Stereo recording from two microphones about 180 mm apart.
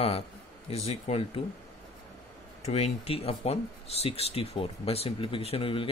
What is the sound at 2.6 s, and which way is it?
Speech, 35° left (ahead or behind).